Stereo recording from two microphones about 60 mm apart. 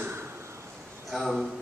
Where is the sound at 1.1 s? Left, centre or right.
Centre.